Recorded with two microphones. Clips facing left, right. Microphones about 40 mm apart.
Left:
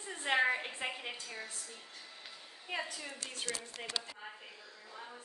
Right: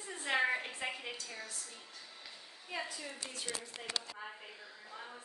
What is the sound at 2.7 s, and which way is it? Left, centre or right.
Speech, left.